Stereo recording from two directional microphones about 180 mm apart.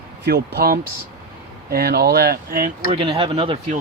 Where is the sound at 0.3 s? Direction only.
60° right (ahead or behind).